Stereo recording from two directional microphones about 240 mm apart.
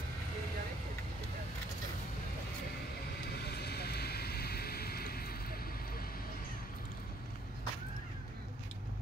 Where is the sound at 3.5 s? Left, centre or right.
Left.